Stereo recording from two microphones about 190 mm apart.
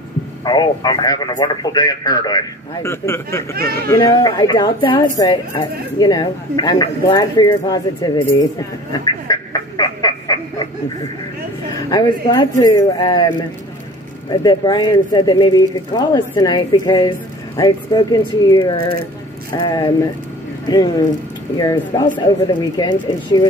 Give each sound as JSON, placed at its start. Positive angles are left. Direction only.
{"t": 0.5, "sound": "a woman's voice", "side_deg": 20}
{"t": 8.9, "sound": "frog", "side_deg": 20}
{"t": 11.7, "sound": "a woman's voice", "side_deg": 20}
{"t": 14.3, "sound": "a woman's voice", "side_deg": 25}
{"t": 21.5, "sound": "a woman's voice", "side_deg": 20}